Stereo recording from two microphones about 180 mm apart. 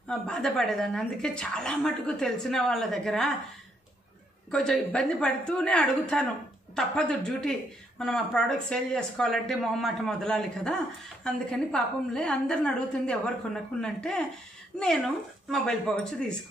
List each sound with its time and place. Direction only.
0.1 s a woman's voice: centre (ahead or behind)
4.5 s a woman's voice: 5° left (ahead or behind)
15.5 s a woman's voice: 5° left (ahead or behind)